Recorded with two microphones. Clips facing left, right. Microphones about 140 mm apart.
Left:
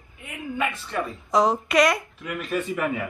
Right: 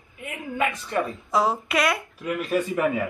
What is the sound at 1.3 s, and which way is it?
Speech, 5° right (ahead or behind).